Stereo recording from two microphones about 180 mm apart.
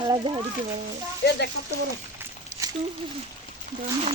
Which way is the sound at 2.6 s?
15° right (ahead or behind).